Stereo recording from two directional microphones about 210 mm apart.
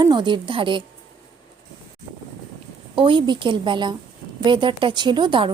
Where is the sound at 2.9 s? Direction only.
25° right (ahead or behind).